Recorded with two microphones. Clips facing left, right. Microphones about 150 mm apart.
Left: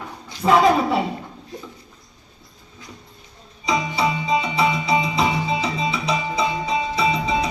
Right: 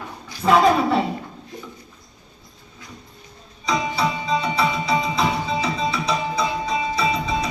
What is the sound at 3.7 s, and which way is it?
Music, 15° left (ahead or behind).